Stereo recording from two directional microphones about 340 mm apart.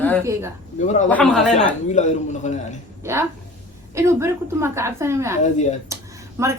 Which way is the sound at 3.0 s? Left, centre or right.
Centre.